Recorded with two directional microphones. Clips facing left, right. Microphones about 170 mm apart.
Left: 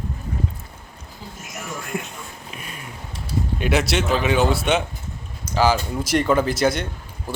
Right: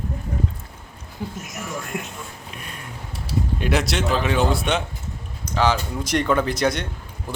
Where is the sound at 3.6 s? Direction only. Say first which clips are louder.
Left 3 dB; centre (ahead or behind).